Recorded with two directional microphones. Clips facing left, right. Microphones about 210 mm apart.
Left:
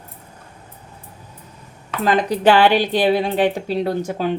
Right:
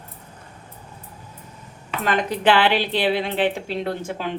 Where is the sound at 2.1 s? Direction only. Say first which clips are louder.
Left 4 dB; 40° left (ahead or behind).